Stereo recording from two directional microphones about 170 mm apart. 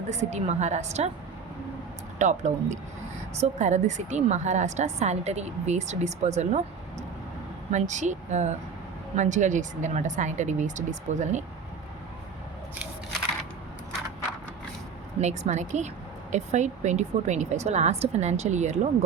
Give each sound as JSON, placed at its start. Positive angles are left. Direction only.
{"t": 0.1, "sound": "a woman's voice", "side_deg": -40}
{"t": 2.1, "sound": "a woman's voice", "side_deg": -45}
{"t": 7.7, "sound": "a woman's voice", "side_deg": -45}
{"t": 15.2, "sound": "a woman's voice", "side_deg": -45}